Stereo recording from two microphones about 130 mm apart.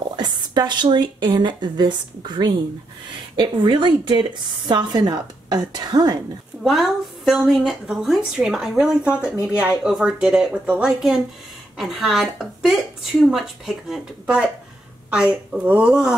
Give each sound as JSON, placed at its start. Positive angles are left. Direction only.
{"t": 0.1, "sound": "speech", "side_deg": -35}
{"t": 6.6, "sound": "a woman's voice", "side_deg": 0}